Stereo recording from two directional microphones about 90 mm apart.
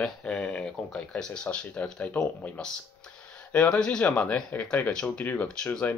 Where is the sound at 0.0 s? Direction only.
10° left (ahead or behind).